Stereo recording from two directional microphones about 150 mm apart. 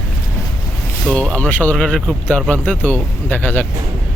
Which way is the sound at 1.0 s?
5° left (ahead or behind).